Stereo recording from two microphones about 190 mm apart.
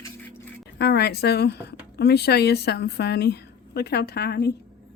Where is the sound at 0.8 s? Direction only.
60° left (ahead or behind).